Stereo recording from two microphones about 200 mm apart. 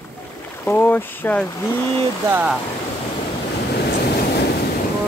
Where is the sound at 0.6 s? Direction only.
10° left (ahead or behind).